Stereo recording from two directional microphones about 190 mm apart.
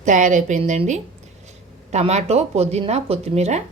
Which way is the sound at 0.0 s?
40° right (ahead or behind).